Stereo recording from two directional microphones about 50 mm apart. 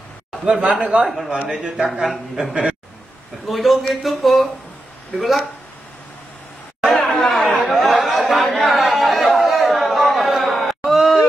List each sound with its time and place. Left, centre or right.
0.5 s speech: right
1.9 s speech: centre
6.9 s chatter: centre
10.3 s a sound: centre